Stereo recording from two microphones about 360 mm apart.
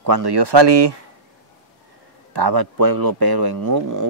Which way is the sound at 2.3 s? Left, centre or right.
Right.